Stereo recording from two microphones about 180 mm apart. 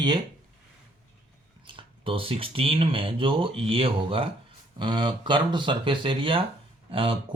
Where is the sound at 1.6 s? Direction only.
30° right (ahead or behind).